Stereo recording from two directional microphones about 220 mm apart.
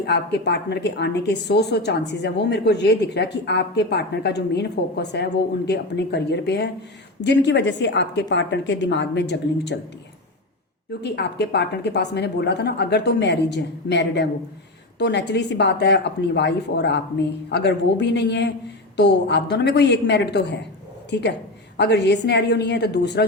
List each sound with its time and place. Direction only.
0.0 s a woman's voice: 50° left (ahead or behind)
11.0 s a woman's voice: 50° left (ahead or behind)